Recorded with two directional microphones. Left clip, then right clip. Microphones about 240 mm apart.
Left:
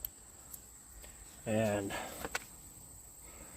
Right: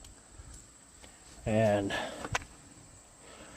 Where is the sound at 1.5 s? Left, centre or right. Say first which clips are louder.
Right 6 dB; right.